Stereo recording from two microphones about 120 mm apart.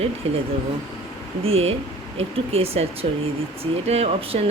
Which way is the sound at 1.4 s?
55° right (ahead or behind).